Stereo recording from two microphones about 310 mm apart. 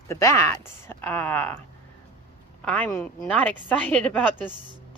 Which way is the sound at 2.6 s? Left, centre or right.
Centre.